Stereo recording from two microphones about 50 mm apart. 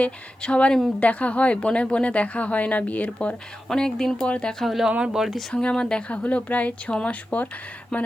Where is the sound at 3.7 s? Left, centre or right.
Centre.